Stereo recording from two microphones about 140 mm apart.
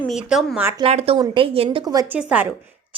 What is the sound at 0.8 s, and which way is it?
Speech, 45° right (ahead or behind).